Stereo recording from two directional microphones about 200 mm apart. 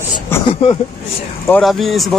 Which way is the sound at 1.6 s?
Centre (ahead or behind).